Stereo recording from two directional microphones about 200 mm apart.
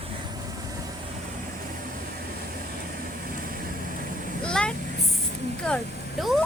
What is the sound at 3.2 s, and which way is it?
Vehicle, 45° right (ahead or behind).